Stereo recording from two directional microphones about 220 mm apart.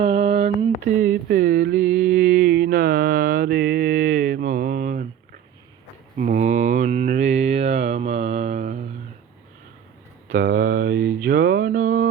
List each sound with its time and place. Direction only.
0.0 s a sound: 25° right (ahead or behind)
0.9 s mantra: 40° right (ahead or behind)
1.8 s mantra: 5° right (ahead or behind)
2.1 s mantra: 40° right (ahead or behind)
6.1 s mantra: 35° right (ahead or behind)
10.6 s mantra: 40° right (ahead or behind)